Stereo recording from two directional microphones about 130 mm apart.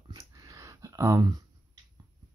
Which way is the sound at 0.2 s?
25° right (ahead or behind).